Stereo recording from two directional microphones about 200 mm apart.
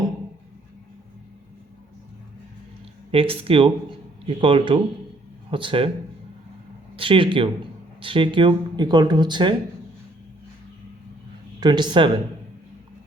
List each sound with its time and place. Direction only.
3.1 s speech: 30° right (ahead or behind)
6.9 s speech: 25° right (ahead or behind)
11.6 s speech: 20° right (ahead or behind)